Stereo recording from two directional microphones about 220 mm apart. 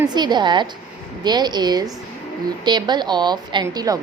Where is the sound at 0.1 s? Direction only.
20° right (ahead or behind).